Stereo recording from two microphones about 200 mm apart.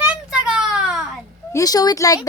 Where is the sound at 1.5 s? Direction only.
15° left (ahead or behind).